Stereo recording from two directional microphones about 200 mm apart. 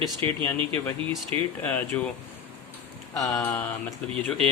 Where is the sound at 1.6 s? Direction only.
10° left (ahead or behind).